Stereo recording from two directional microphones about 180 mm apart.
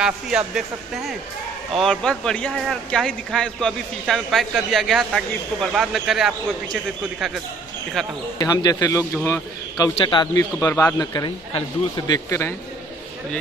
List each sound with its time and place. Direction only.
0.0 s speech: 5° right (ahead or behind)
8.4 s a man's voice: 20° left (ahead or behind)